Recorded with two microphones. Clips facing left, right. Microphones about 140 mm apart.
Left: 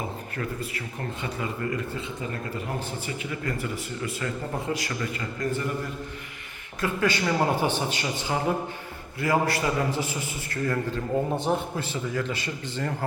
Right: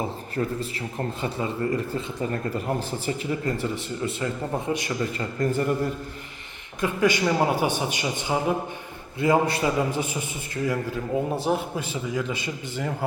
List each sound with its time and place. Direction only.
1.2 s speech: 35° right (ahead or behind)
3.1 s a man's voice: 30° right (ahead or behind)
5.4 s speech: 35° right (ahead or behind)
6.8 s a man's voice: 15° right (ahead or behind)
11.8 s a man's voice: 15° right (ahead or behind)